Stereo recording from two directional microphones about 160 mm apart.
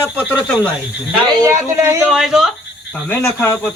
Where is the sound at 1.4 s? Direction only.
20° right (ahead or behind).